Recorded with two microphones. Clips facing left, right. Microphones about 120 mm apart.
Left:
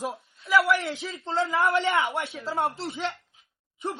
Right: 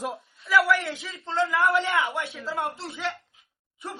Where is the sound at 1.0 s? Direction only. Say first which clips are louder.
Right 1 dB; 30° left (ahead or behind).